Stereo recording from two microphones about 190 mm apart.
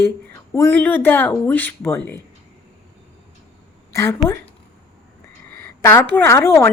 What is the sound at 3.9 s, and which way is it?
Speech, 15° left (ahead or behind).